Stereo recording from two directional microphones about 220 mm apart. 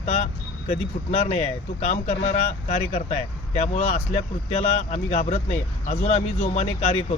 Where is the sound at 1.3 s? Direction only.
30° left (ahead or behind).